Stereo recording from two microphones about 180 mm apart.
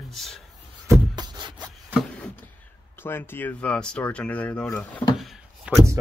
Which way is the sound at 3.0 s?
10° left (ahead or behind).